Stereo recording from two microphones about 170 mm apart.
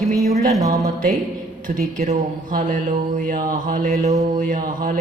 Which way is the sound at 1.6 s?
45° right (ahead or behind).